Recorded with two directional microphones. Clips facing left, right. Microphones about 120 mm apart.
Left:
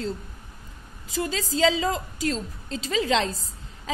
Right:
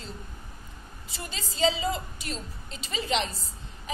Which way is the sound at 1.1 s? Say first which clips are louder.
Left 13 dB; 90° left.